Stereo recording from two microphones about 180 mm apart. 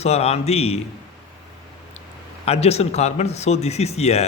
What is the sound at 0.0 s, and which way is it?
Speech, 35° left (ahead or behind).